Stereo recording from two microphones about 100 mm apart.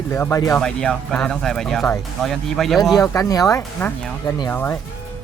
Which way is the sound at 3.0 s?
35° left (ahead or behind).